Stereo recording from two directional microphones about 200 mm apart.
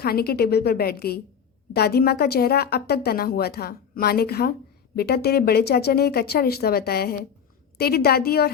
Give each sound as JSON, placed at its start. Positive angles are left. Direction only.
{"t": 0.0, "sound": "a woman's voice", "side_deg": 50}